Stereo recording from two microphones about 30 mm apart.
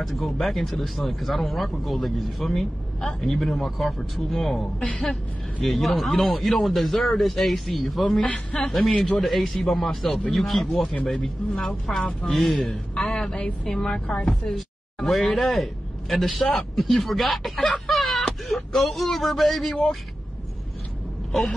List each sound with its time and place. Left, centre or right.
0.0 s a man's voice: centre
4.8 s a woman's voice: left
5.6 s speech: centre
8.2 s a man's voice: left
8.5 s a man's voice: centre
12.3 s a man's voice: centre
13.3 s a man's voice: left; by 17.6 s centre
17.8 s a sound: centre
18.5 s speech: centre
21.3 s a sound: centre